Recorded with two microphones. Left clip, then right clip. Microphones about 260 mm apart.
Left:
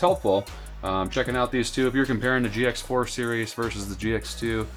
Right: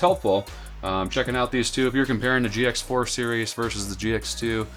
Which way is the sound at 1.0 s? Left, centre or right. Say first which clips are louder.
Right 1 dB; centre.